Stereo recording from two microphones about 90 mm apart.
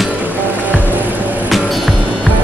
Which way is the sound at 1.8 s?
15° right (ahead or behind).